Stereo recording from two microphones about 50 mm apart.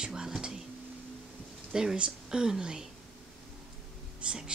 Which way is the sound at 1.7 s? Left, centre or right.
Centre.